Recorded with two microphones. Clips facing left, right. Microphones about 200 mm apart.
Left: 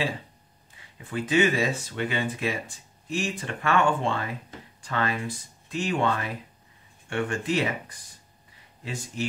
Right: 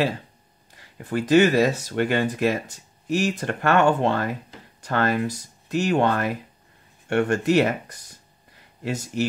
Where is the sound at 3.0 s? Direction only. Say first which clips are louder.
Right 7 dB; 70° right (ahead or behind).